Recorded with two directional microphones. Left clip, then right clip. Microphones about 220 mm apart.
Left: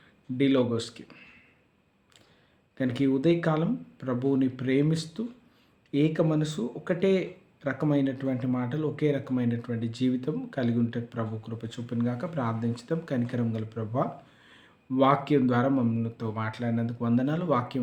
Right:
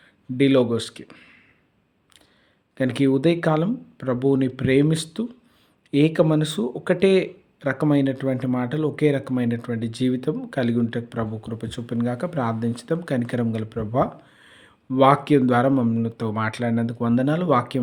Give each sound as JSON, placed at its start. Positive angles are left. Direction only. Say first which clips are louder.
{"t": 0.3, "sound": "speech", "louder": "right 6 dB", "side_deg": -35}
{"t": 2.7, "sound": "speech", "louder": "right 6 dB", "side_deg": -40}